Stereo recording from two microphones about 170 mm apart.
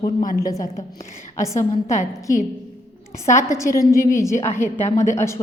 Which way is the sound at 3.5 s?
15° left (ahead or behind).